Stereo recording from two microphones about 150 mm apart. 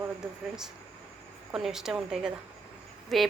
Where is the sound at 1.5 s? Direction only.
5° right (ahead or behind).